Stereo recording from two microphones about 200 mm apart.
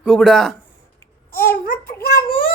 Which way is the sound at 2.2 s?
45° left (ahead or behind).